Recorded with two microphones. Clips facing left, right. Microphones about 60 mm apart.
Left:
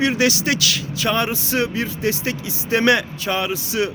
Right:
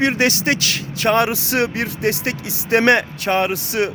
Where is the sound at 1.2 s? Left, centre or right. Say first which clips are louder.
Right 3 dB; right.